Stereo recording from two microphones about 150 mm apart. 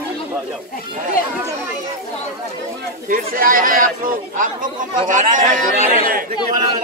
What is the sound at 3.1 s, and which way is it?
Speech, 65° right (ahead or behind).